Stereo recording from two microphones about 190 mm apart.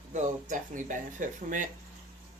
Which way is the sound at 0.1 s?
40° right (ahead or behind).